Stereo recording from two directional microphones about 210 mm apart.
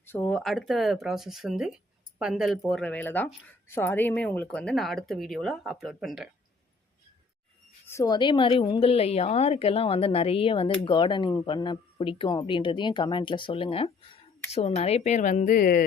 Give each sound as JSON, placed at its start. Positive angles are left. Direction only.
{"t": 0.0, "sound": "speech", "side_deg": 10}
{"t": 7.9, "sound": "speech", "side_deg": 15}